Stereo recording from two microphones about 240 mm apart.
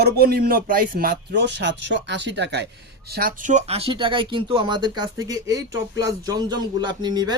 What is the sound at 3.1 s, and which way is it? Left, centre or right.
Speech, right.